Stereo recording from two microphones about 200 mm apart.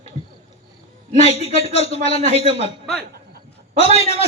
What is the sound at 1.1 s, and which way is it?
A man's voice, 30° left (ahead or behind).